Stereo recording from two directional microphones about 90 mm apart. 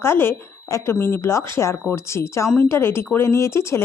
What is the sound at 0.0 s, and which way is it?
A woman's voice, 25° left (ahead or behind).